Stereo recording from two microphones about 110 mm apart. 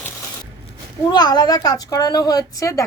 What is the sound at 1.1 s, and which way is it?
A woman's voice, 40° left (ahead or behind).